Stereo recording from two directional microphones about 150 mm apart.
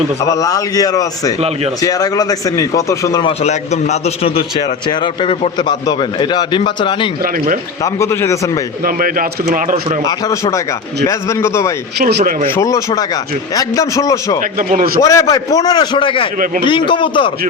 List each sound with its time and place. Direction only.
0.3 s a man's voice: 25° left (ahead or behind)
3.4 s a man's voice: 50° left (ahead or behind); by 7.1 s 30° left (ahead or behind)
7.9 s a man's voice: 20° left (ahead or behind)
8.8 s speech: 70° right (ahead or behind)
10.1 s a man's voice: 25° left (ahead or behind)
11.9 s speech: 85° right
12.5 s a man's voice: 20° left (ahead or behind)
14.7 s a man's voice: 65° right (ahead or behind)
15.0 s a man's voice: 20° left (ahead or behind)